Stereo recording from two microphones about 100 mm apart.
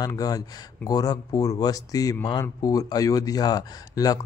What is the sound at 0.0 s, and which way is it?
Speech, 40° left (ahead or behind).